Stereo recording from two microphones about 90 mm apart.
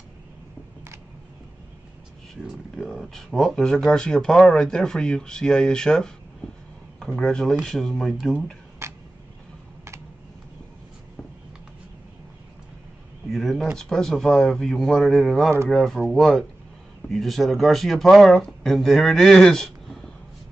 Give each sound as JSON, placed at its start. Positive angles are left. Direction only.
{"t": 2.4, "sound": "speech", "side_deg": 0}
{"t": 8.8, "sound": "a sound", "side_deg": -30}
{"t": 13.3, "sound": "speech", "side_deg": 0}